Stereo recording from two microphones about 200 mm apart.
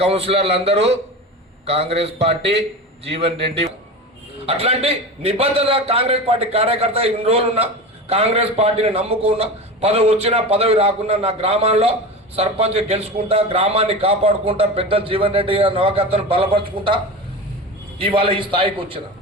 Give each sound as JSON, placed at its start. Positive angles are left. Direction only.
{"t": 0.0, "sound": "a man's voice", "side_deg": -30}
{"t": 18.0, "sound": "a man's voice", "side_deg": -25}